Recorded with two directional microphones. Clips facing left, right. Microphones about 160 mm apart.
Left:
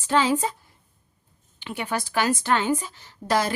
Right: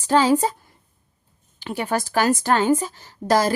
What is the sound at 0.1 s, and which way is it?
Speech, 40° right (ahead or behind).